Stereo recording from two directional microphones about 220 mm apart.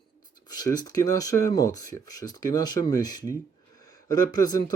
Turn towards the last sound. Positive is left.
turn(degrees=15)  # may be behind; listen again after turning